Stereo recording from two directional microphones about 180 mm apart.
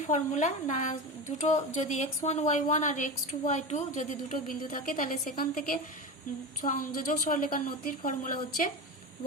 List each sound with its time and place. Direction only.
0.1 s a woman's voice: 40° left (ahead or behind)